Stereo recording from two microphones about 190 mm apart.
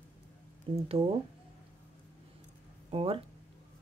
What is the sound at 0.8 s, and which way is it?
Speech, 30° right (ahead or behind).